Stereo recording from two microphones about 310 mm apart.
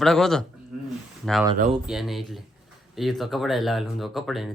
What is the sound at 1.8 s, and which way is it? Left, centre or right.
Speech, centre.